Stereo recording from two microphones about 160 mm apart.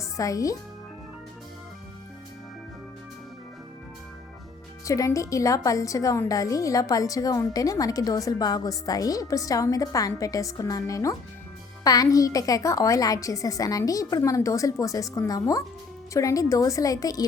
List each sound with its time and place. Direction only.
0.0 s speech: 20° left (ahead or behind)
4.9 s a woman's voice: 20° left (ahead or behind)